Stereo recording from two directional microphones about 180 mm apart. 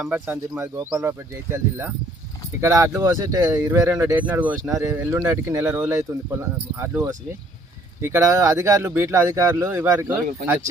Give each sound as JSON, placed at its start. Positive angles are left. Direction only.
{"t": 0.0, "sound": "speech", "side_deg": -10}